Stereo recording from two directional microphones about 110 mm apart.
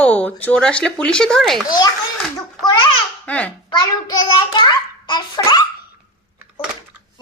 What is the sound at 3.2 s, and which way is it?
Speech, 15° left (ahead or behind).